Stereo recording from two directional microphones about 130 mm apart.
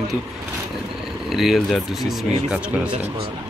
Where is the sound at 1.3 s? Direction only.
Centre (ahead or behind).